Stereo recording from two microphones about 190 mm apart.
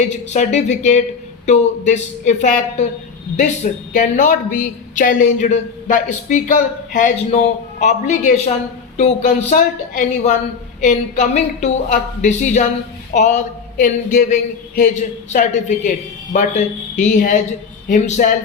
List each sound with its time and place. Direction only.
0.1 s a woman's voice: 40° left (ahead or behind)